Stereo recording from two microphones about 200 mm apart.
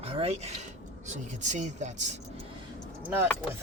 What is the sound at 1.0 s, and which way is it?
Speech, 35° right (ahead or behind).